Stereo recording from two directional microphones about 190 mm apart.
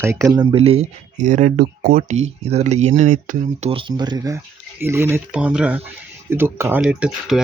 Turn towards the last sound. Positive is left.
turn(degrees=-5)  # may be behind; listen again after turning